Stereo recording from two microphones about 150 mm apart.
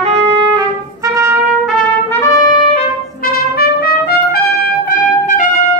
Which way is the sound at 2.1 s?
20° left (ahead or behind).